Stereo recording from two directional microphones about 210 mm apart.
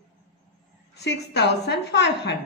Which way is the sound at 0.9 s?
50° left (ahead or behind).